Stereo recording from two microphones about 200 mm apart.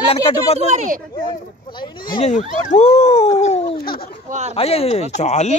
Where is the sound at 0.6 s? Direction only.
35° right (ahead or behind).